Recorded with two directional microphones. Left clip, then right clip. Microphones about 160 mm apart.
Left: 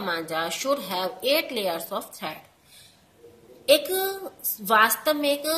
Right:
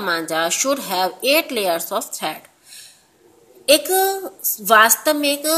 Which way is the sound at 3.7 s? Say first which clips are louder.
Right 6 dB; 40° right (ahead or behind).